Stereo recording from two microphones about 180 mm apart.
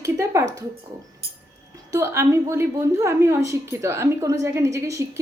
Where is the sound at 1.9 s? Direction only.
15° right (ahead or behind).